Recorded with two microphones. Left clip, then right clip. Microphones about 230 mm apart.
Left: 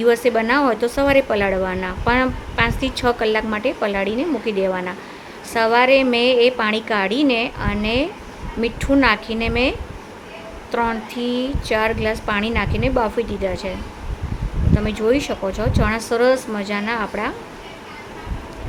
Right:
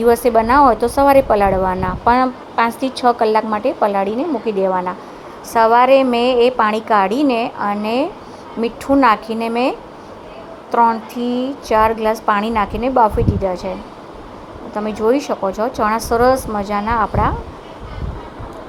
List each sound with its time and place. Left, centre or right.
0.0 s a woman's voice: centre
11.2 s speech: right
11.7 s a woman's voice: centre
14.7 s a woman's voice: centre